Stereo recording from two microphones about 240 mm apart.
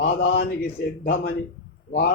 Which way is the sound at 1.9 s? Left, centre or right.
Left.